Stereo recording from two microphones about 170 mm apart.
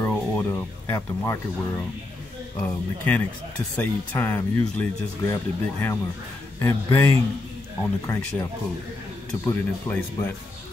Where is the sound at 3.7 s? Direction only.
10° left (ahead or behind).